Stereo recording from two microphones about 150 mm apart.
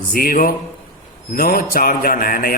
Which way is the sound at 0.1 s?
75° left (ahead or behind).